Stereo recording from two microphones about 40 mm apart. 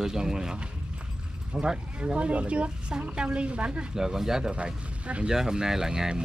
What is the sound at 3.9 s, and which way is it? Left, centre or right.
Speech, centre.